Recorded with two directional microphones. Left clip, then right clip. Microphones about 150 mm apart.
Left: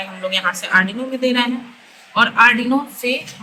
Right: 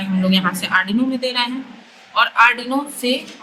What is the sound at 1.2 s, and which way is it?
A woman's voice, 25° right (ahead or behind).